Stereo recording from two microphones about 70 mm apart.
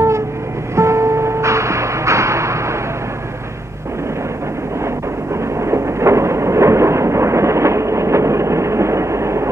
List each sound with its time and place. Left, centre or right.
0.7 s music: right
5.6 s train: right